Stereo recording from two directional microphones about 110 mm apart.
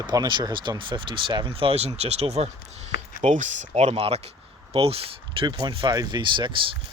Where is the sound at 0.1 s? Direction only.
40° right (ahead or behind).